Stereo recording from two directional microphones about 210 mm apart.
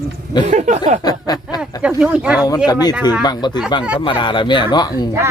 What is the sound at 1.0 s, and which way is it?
Snicker, 20° left (ahead or behind).